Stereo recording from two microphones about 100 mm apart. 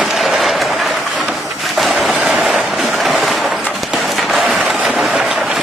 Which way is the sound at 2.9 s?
Centre (ahead or behind).